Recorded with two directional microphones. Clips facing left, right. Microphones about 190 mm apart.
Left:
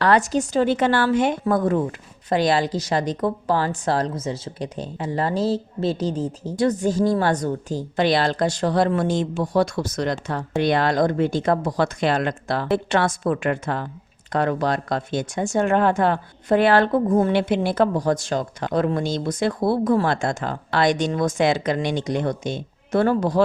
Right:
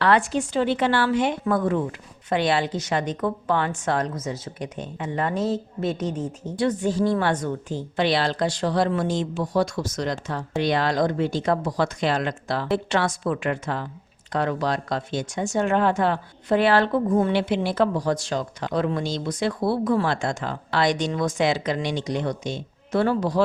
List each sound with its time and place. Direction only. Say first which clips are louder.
0.0 s speech: left 2 dB; 40° left (ahead or behind)